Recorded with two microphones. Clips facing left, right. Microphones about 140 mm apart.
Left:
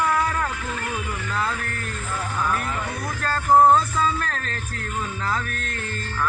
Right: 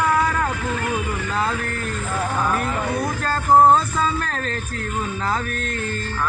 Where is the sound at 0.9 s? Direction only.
25° right (ahead or behind).